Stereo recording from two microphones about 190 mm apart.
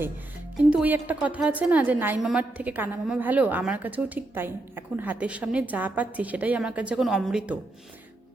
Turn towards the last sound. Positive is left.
turn(degrees=-5)  # may be behind; listen again after turning